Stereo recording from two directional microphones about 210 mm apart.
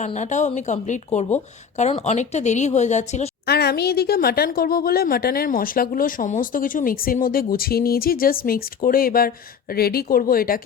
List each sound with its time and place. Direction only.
0.0 s a woman's voice: 35° left (ahead or behind)
3.4 s a woman's voice: 50° left (ahead or behind)